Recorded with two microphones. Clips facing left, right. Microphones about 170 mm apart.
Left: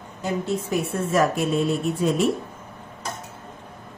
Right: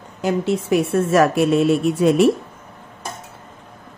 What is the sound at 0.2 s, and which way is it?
A woman's voice, 85° right.